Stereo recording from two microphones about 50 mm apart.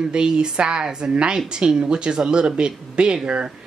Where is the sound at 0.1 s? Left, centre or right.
Centre.